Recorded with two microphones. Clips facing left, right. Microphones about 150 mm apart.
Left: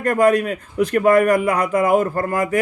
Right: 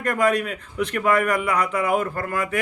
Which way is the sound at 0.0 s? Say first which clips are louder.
Left 5 dB; 45° left (ahead or behind).